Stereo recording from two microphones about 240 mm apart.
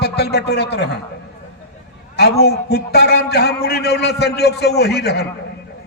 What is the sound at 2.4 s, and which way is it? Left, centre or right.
A man's voice, left.